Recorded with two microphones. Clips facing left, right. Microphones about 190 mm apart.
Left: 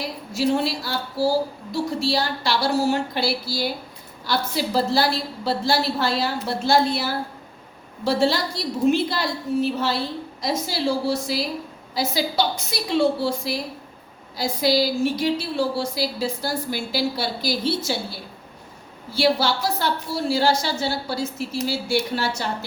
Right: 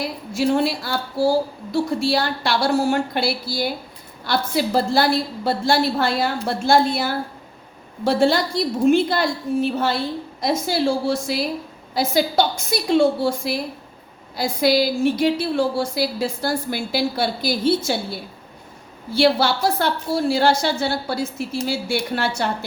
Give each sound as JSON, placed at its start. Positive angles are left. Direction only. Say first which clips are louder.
{"t": 0.3, "sound": "a woman's voice", "louder": "right 2 dB", "side_deg": -55}
{"t": 19.1, "sound": "a woman's voice", "louder": "right 3 dB", "side_deg": -55}